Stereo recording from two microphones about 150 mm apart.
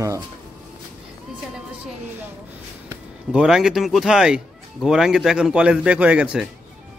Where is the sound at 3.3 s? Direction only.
5° right (ahead or behind).